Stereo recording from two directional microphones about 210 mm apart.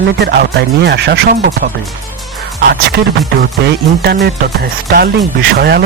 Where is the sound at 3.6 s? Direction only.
50° right (ahead or behind).